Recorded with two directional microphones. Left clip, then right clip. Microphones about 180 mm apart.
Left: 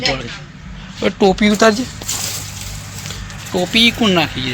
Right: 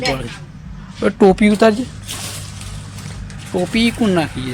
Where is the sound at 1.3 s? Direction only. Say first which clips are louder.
Left 1 dB; 20° right (ahead or behind).